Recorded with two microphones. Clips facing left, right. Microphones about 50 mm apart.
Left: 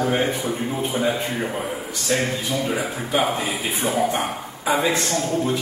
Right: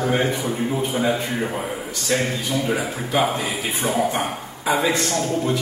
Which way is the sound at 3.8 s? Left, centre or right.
Left.